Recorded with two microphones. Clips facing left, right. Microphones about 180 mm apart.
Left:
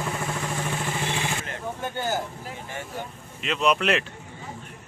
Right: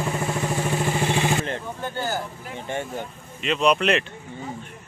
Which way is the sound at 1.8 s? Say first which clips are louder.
Even; 20° left (ahead or behind).